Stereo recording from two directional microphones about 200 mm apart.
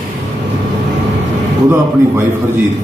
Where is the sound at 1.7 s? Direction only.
10° right (ahead or behind).